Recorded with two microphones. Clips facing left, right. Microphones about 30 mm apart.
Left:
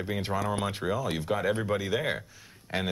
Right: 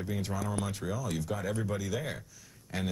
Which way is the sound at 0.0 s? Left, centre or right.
Left.